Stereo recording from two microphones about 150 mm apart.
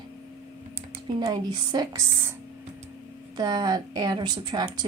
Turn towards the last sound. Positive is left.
turn(degrees=-25)  # may be behind; listen again after turning